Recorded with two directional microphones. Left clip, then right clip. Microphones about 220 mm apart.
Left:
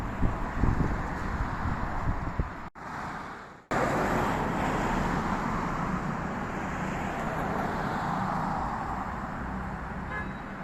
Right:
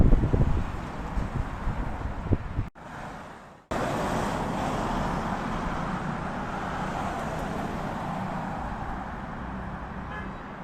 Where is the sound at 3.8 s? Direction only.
50° right (ahead or behind).